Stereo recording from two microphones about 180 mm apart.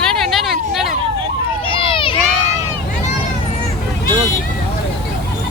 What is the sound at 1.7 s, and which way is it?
Run, 30° left (ahead or behind).